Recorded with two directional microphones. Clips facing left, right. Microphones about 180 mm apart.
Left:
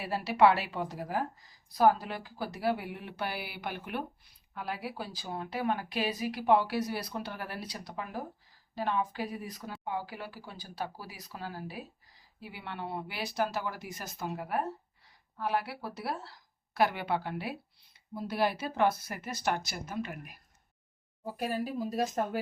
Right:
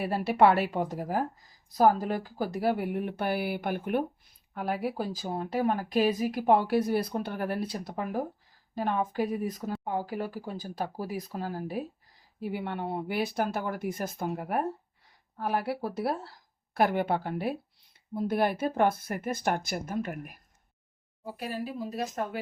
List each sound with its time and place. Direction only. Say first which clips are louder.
0.0 s speech: right 2 dB; 50° right (ahead or behind)
21.3 s speech: left 2 dB; 40° left (ahead or behind)